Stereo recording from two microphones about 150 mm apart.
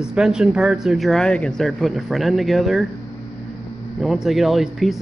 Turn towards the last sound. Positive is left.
turn(degrees=0)  # may be behind; listen again after turning